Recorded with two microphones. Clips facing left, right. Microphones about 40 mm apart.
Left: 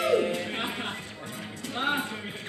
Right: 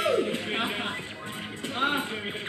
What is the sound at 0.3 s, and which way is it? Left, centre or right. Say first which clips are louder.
Music: right 2 dB; right.